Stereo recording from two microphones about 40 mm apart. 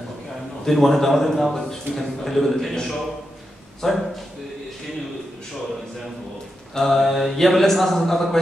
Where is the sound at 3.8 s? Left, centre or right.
Centre.